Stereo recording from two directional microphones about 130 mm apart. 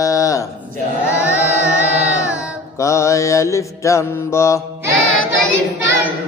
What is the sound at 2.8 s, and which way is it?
Mantra, 25° left (ahead or behind).